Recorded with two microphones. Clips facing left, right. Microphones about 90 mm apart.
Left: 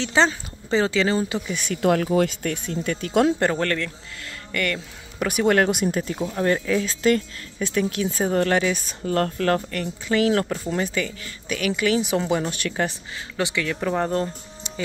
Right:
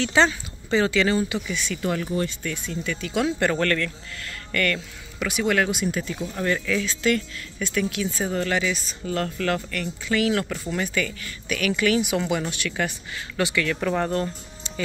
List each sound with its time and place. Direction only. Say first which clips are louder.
0.0 s speech: even; 25° left (ahead or behind)
1.5 s speech: left 5 dB; 55° left (ahead or behind); by 2.5 s 75° left (ahead or behind)
2.5 s speech: left 3 dB; 50° left (ahead or behind)
3.3 s speech: even; 25° left (ahead or behind)
5.2 s speech: left 4 dB; 45° left (ahead or behind)
5.9 s speech: left 3 dB; 35° left (ahead or behind)
13.4 s speech: right 1 dB; 20° left (ahead or behind)